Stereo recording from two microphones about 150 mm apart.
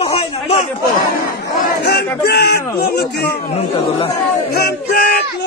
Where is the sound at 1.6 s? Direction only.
90° left.